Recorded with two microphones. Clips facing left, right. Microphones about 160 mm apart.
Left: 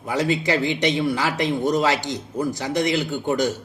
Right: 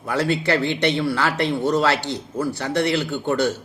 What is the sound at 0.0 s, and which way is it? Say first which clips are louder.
A man's voice: even; 15° left (ahead or behind).